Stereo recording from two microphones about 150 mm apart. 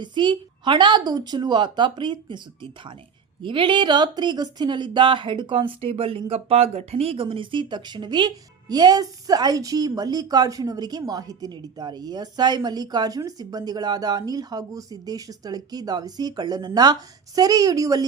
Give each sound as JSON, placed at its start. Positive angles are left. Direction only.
{"t": 0.0, "sound": "a woman's voice", "side_deg": -30}